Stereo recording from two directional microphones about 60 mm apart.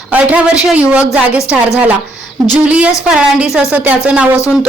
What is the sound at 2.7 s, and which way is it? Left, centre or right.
A woman's voice, right.